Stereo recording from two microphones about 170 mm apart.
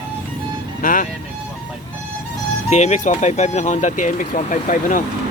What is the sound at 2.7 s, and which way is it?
Speech, 45° left (ahead or behind).